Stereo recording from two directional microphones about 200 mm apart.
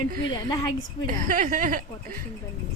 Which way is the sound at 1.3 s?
40° right (ahead or behind).